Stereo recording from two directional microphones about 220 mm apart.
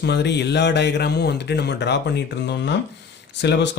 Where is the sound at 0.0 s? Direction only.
50° left (ahead or behind).